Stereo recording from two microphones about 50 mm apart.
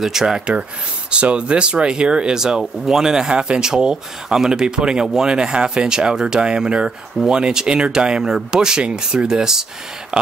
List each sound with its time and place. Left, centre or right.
0.0 s speech: centre
1.1 s speech: right